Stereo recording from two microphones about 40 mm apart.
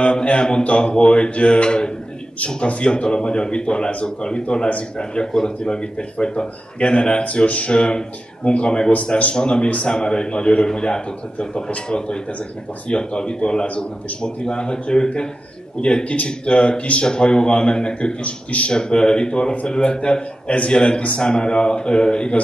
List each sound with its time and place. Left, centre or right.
0.0 s speech: left
8.9 s speech: left
17.0 s speech: left
18.7 s speech: left